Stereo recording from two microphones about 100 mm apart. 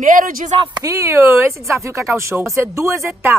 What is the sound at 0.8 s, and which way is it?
Speech, 30° right (ahead or behind).